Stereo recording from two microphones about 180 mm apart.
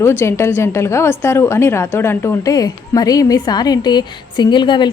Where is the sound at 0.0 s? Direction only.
15° left (ahead or behind).